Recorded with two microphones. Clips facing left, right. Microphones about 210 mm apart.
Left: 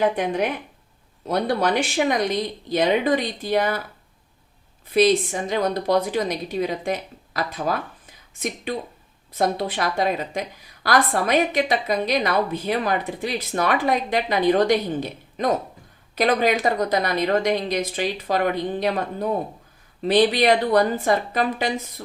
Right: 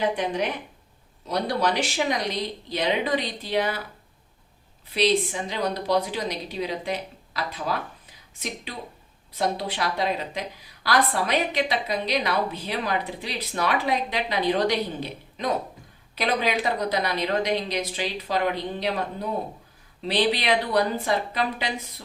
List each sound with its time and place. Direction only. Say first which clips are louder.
0.0 s a woman's voice: left 4 dB; 50° left (ahead or behind)
4.9 s a woman's voice: left 5 dB; 45° left (ahead or behind)